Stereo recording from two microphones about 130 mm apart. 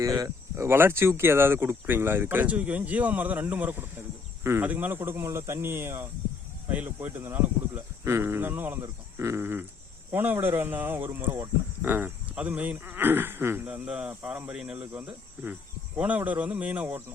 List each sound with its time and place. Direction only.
0.0 s speech: 25° right (ahead or behind)